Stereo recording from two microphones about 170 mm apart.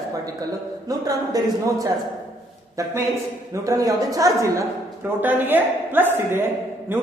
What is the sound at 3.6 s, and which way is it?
A man's voice, 20° right (ahead or behind).